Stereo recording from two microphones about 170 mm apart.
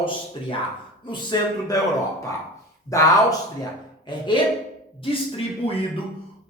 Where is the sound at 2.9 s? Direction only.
20° left (ahead or behind); by 5.8 s 35° left (ahead or behind).